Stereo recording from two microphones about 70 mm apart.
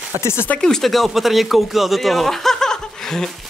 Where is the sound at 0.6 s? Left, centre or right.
Centre.